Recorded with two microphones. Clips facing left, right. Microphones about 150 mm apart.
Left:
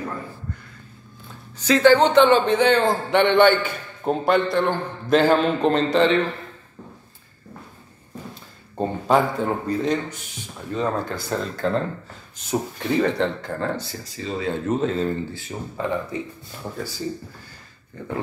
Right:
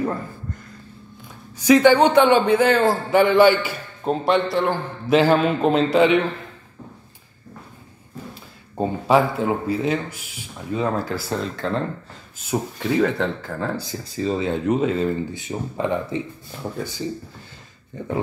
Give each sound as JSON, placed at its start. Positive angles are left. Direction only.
{"t": 1.6, "sound": "a man's voice", "side_deg": -15}
{"t": 8.7, "sound": "a man's voice", "side_deg": -5}
{"t": 14.1, "sound": "speech", "side_deg": -35}
{"t": 14.4, "sound": "a man's voice", "side_deg": -15}
{"t": 15.4, "sound": "speech", "side_deg": -20}